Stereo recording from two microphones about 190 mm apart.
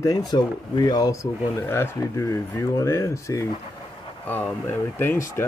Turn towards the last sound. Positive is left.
turn(degrees=15)  # may be behind; listen again after turning